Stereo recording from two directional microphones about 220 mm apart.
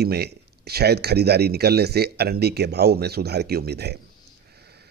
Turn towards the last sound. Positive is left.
turn(degrees=-45)  # may be behind; listen again after turning